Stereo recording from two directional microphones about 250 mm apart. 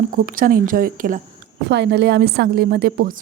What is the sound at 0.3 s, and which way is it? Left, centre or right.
A woman's voice, right.